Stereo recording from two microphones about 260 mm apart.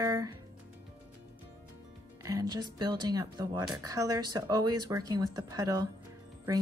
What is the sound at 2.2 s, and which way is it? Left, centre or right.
Speech, centre.